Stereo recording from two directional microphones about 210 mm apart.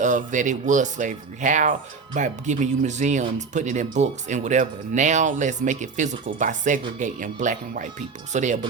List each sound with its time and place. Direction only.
0.0 s speech: 35° right (ahead or behind)